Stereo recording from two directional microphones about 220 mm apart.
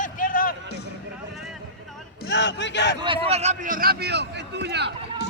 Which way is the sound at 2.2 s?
55° left (ahead or behind).